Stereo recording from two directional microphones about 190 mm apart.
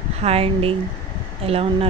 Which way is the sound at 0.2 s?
30° right (ahead or behind).